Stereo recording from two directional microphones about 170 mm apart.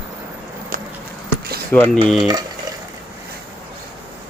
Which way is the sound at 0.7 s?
55° right (ahead or behind).